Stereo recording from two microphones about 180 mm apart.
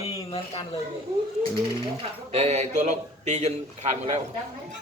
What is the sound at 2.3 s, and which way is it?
A man's voice, 35° right (ahead or behind).